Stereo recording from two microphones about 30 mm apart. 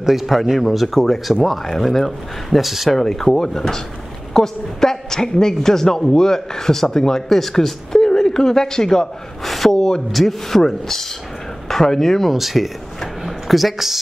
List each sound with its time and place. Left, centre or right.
0.0 s speech: centre
2.6 s speech: centre
3.0 s a woman's voice: centre
9.4 s a woman's voice: centre
12.4 s speech: centre
13.2 s a sound: centre